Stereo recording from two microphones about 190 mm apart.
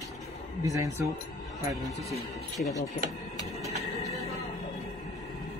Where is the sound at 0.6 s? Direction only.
15° right (ahead or behind).